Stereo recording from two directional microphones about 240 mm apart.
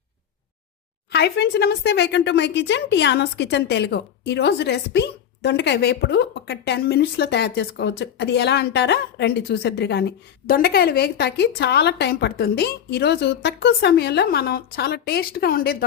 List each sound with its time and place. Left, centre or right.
1.1 s speech: left